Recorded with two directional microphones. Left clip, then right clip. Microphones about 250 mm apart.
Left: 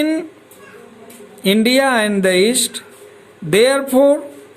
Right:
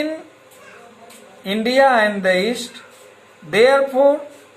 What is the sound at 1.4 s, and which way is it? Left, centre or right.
A man's voice, left.